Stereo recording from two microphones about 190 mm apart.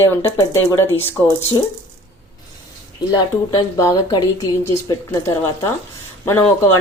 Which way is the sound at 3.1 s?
20° left (ahead or behind).